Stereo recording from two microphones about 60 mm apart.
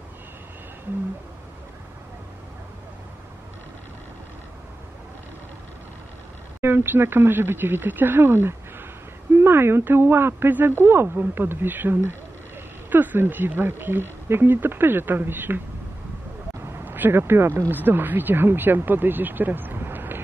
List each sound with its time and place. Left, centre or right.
6.6 s speech: right
16.6 s speech: right